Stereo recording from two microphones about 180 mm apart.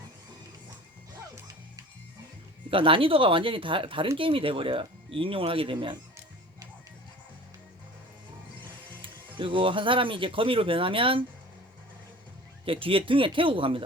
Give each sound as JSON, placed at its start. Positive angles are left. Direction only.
{"t": 2.6, "sound": "speech", "side_deg": -30}
{"t": 9.0, "sound": "speech", "side_deg": -30}
{"t": 12.6, "sound": "speech", "side_deg": -30}